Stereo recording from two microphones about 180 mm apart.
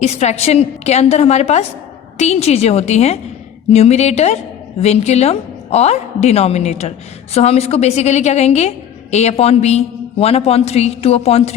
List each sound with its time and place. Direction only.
0.0 s a woman's voice: 35° left (ahead or behind)